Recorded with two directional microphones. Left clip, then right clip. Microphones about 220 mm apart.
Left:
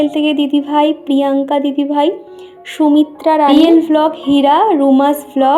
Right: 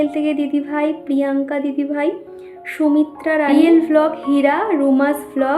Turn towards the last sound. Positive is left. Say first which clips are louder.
# left 6 dB
turn(degrees=20)  # may be behind; listen again after turning